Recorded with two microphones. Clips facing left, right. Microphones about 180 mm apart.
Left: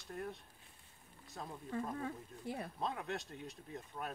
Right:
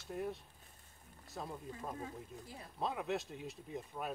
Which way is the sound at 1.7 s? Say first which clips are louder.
Left 4 dB; 65° left (ahead or behind).